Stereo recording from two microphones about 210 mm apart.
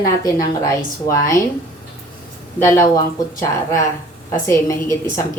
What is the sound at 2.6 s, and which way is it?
A woman's voice, 15° left (ahead or behind).